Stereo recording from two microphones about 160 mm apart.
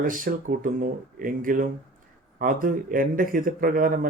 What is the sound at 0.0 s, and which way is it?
Speech, 60° right (ahead or behind).